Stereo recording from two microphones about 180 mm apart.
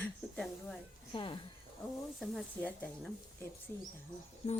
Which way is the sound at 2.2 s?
Centre (ahead or behind).